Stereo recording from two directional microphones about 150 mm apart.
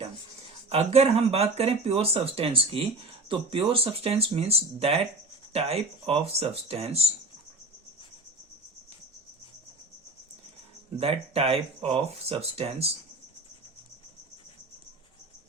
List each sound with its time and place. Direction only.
0.7 s speech: 45° right (ahead or behind)
10.9 s speech: 40° right (ahead or behind)